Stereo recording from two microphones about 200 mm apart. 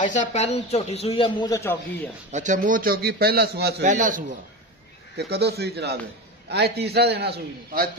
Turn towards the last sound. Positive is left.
turn(degrees=-55)  # may be behind; listen again after turning